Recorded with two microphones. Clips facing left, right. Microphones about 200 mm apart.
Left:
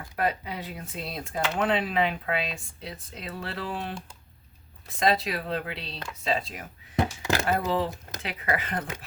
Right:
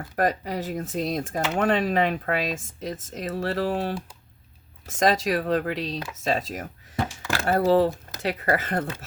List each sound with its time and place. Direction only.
0.2 s speech: 40° right (ahead or behind)
7.0 s door: 20° left (ahead or behind)
7.4 s speech: 40° right (ahead or behind)